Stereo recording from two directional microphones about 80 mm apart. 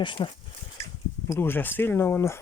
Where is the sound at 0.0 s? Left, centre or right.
Left.